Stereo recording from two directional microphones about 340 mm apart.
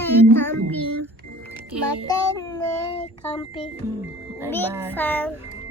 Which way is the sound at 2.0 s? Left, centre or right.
Centre.